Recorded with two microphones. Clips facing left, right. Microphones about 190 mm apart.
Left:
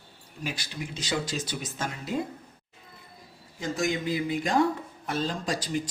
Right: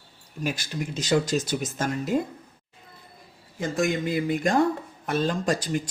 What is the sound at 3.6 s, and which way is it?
Speech, 55° right (ahead or behind).